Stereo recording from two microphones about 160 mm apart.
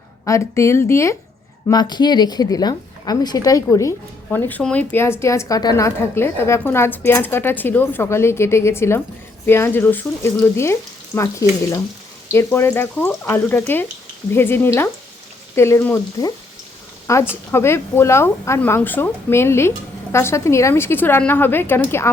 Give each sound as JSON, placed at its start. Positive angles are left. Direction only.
{"t": 0.3, "sound": "a woman's voice", "side_deg": 20}